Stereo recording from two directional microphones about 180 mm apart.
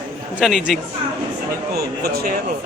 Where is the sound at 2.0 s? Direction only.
55° right (ahead or behind).